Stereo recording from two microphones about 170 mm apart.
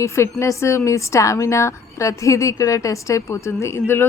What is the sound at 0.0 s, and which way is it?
A woman's voice, 15° left (ahead or behind).